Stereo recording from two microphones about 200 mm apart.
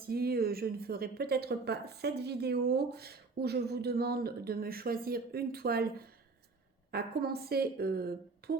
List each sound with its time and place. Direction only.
0.0 s speech: 50° right (ahead or behind)